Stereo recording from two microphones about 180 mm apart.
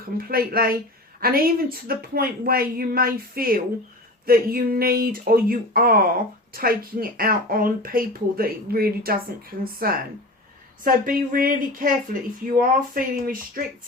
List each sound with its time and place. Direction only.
0.3 s speech: 55° right (ahead or behind)